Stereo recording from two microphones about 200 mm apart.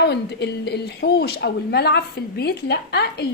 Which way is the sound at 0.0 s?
55° left (ahead or behind).